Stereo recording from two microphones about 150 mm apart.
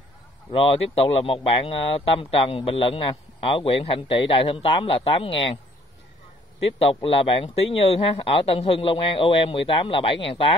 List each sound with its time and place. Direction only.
0.5 s speech: 35° left (ahead or behind)
6.8 s speech: 35° left (ahead or behind)